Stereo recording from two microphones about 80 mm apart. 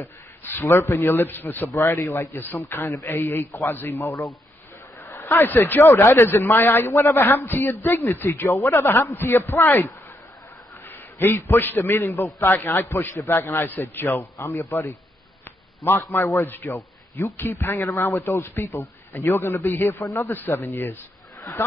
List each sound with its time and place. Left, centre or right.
0.0 s a man's voice: left
1.7 s a man's voice: left
2.9 s a man's voice: left
5.8 s a man's voice: left
6.3 s a man's voice: left
9.1 s a man's voice: left
16.1 s a man's voice: left